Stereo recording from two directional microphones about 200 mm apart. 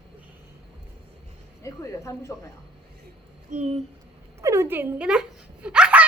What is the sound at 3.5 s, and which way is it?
Speech, 35° right (ahead or behind).